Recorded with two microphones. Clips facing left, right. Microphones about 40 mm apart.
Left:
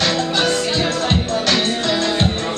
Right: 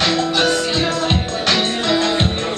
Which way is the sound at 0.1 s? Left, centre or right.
Centre.